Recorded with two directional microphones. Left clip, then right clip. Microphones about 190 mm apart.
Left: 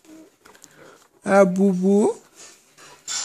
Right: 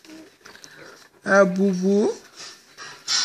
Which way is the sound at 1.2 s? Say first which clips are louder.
Left 1 dB; 40° left (ahead or behind).